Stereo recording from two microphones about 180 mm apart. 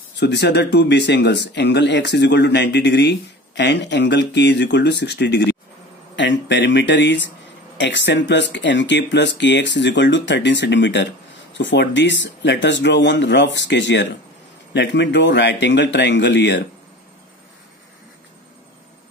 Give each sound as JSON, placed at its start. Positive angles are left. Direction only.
{"t": 0.2, "sound": "speech", "side_deg": 70}
{"t": 6.1, "sound": "speech", "side_deg": 90}